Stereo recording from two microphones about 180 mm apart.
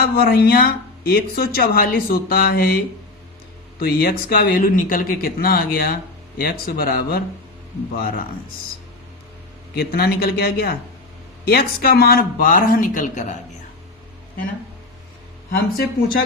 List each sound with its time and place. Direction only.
0.0 s speech: 55° left (ahead or behind)
9.7 s speech: 55° left (ahead or behind)
15.5 s speech: 55° left (ahead or behind)